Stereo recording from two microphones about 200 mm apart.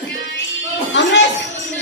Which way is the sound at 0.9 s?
65° left (ahead or behind).